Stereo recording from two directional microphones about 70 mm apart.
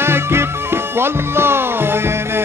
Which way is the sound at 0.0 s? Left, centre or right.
Right.